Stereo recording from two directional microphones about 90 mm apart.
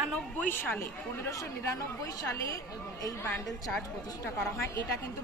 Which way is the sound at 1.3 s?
35° left (ahead or behind).